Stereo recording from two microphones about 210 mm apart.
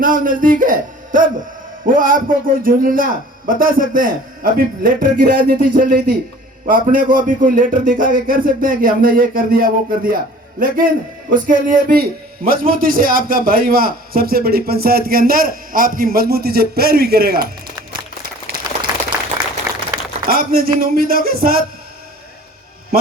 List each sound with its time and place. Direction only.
0.0 s a man's voice: 40° right (ahead or behind)
19.7 s a sound: 15° right (ahead or behind)
20.2 s a man's voice: 45° right (ahead or behind)